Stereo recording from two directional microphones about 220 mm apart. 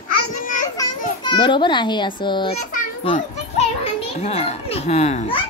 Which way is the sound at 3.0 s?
30° left (ahead or behind).